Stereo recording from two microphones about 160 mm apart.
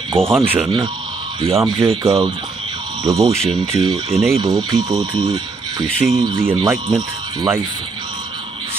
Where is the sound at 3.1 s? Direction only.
20° right (ahead or behind).